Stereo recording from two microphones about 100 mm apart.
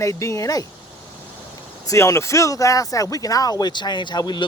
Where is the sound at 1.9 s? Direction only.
30° left (ahead or behind).